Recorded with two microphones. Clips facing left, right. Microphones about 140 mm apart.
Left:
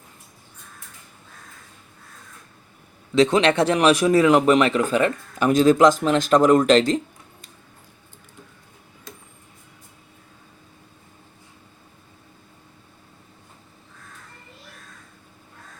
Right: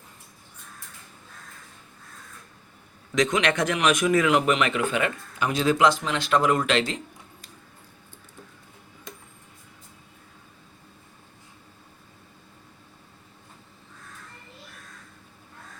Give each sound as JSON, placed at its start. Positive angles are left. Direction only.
{"t": 3.2, "sound": "speech", "side_deg": 30}